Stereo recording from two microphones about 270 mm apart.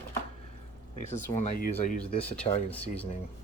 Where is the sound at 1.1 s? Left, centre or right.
Left.